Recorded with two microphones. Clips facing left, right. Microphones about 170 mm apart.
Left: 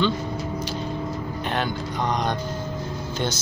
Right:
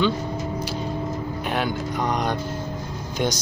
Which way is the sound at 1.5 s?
10° right (ahead or behind).